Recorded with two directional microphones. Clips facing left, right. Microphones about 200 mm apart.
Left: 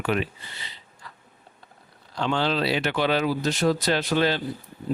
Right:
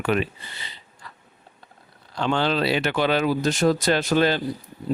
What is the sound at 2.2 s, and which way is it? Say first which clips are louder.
Speech: right 2 dB; 55° right (ahead or behind).